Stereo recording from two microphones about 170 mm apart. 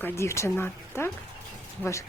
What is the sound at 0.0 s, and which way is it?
Speech, 15° left (ahead or behind).